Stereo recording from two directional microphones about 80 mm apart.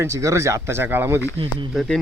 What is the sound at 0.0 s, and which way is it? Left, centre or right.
Speech, right.